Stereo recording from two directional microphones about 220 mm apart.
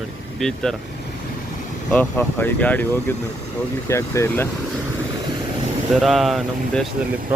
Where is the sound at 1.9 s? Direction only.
10° left (ahead or behind).